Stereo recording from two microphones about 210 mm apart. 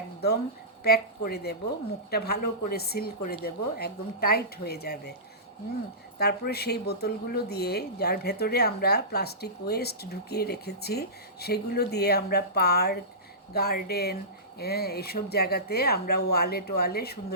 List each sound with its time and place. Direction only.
0.9 s speech: 50° left (ahead or behind)
6.1 s speech: 50° left (ahead or behind)